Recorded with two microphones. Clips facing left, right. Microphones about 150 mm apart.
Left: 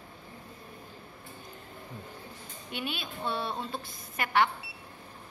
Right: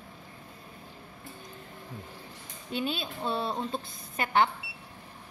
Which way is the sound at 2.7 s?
30° right (ahead or behind).